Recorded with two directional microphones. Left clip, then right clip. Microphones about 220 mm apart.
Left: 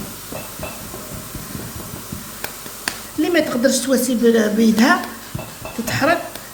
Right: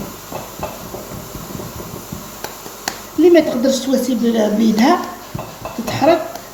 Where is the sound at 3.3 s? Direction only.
55° left (ahead or behind).